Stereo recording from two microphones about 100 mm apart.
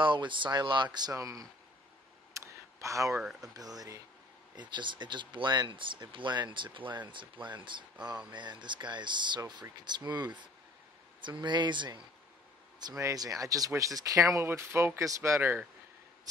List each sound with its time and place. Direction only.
0.0 s speech: 55° right (ahead or behind)
1.1 s speech: 35° right (ahead or behind)
2.3 s a sound: 30° right (ahead or behind)
3.2 s speech: 5° right (ahead or behind)
3.5 s speech: 40° right (ahead or behind)
4.6 s speech: 50° right (ahead or behind)
12.9 s speech: 35° right (ahead or behind)